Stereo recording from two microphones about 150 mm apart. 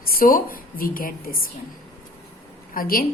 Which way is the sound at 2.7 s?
70° left (ahead or behind).